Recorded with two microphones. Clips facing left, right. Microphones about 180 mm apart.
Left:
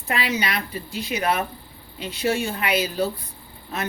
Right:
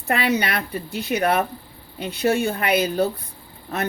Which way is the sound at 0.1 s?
60° right (ahead or behind).